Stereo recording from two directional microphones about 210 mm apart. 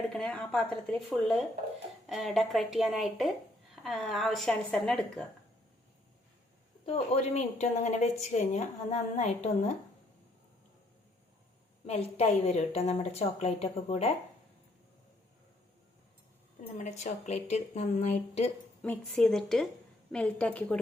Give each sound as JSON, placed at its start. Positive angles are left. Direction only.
{"t": 0.1, "sound": "a woman's voice", "side_deg": 5}
{"t": 6.8, "sound": "speech", "side_deg": 30}
{"t": 11.9, "sound": "a woman's voice", "side_deg": 30}
{"t": 16.7, "sound": "speech", "side_deg": 35}
{"t": 18.8, "sound": "a woman's voice", "side_deg": 5}